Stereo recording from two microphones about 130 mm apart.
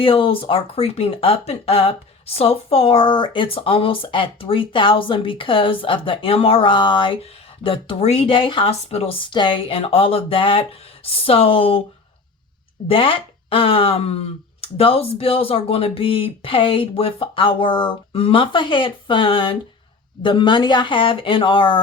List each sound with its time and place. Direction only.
0.0 s speech: 45° left (ahead or behind)
12.9 s speech: 45° left (ahead or behind)